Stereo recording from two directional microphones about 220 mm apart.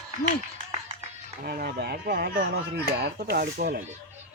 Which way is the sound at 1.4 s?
45° right (ahead or behind).